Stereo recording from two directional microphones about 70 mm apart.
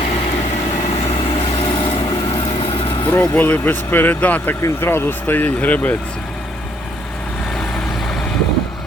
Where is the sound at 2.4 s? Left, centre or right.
Left.